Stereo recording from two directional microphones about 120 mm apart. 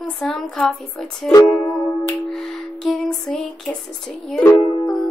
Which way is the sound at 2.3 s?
Centre (ahead or behind).